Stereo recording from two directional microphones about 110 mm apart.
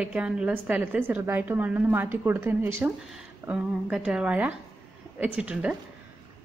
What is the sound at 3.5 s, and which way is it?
A woman's voice, 10° right (ahead or behind).